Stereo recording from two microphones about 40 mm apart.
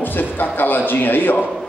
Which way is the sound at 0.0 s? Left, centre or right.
Left.